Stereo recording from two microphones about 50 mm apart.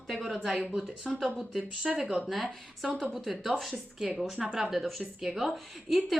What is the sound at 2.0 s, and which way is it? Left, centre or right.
Speech, centre.